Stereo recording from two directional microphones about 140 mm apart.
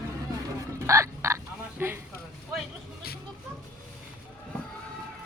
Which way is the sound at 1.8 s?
15° right (ahead or behind).